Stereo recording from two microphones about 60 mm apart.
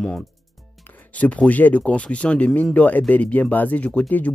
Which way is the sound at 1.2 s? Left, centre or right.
Left.